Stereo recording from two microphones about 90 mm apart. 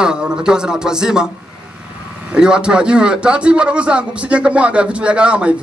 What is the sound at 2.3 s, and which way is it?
A man's voice, 10° right (ahead or behind).